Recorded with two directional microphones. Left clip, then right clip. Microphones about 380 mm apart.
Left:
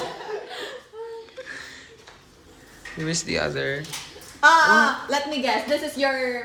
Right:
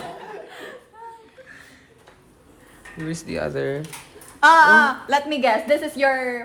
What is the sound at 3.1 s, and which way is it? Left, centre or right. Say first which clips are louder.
Speech: left 2 dB; centre.